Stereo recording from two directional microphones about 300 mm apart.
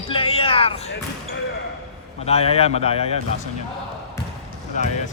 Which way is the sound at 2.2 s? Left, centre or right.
Left.